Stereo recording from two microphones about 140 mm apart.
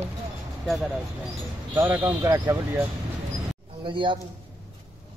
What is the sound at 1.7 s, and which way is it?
Speech, 15° right (ahead or behind).